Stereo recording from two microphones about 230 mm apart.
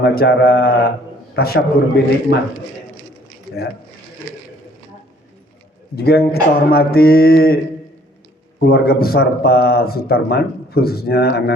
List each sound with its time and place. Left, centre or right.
0.0 s a man's voice: left
6.0 s a man's voice: left